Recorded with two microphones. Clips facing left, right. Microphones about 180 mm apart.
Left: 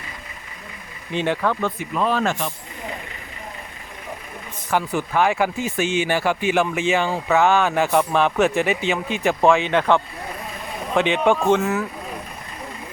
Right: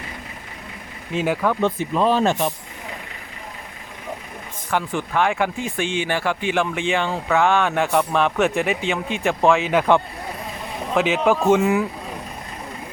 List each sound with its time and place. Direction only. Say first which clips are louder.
1.1 s speech: right 1 dB; 5° right (ahead or behind)
1.6 s speech: right 3 dB; 25° right (ahead or behind)
4.7 s speech: left 1 dB; 5° left (ahead or behind); by 11.9 s 15° right (ahead or behind)